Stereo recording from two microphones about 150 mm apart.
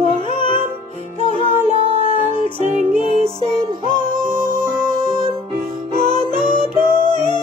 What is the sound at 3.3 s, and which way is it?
Music, 35° right (ahead or behind).